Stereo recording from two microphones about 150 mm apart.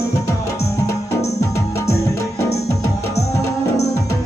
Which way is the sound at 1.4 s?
20° left (ahead or behind).